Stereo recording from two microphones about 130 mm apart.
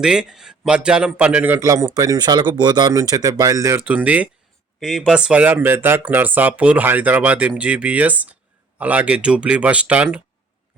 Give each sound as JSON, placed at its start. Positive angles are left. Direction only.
{"t": 0.0, "sound": "a man's voice", "side_deg": -5}